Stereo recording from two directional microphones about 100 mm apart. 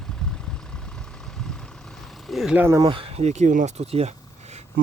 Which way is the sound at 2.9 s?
70° right (ahead or behind).